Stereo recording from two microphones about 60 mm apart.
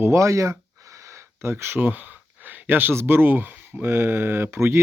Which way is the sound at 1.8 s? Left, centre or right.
Right.